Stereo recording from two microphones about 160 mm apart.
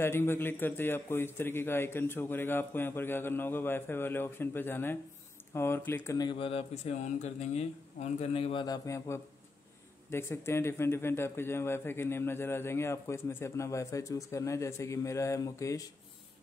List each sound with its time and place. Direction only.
0.0 s speech: 15° left (ahead or behind)
6.1 s speech: 30° left (ahead or behind)
8.6 s speech: 20° left (ahead or behind)